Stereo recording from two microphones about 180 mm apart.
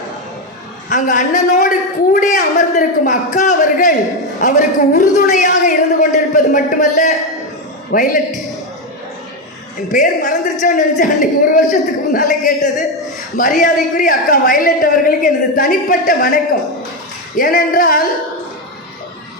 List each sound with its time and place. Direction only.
0.9 s a woman's voice: 45° left (ahead or behind)
9.9 s a woman's voice: 45° left (ahead or behind)